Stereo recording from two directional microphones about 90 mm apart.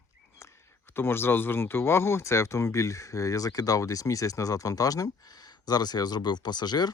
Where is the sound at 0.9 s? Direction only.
25° left (ahead or behind).